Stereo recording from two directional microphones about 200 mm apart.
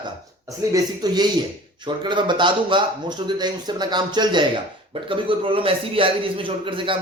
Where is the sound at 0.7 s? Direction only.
20° right (ahead or behind).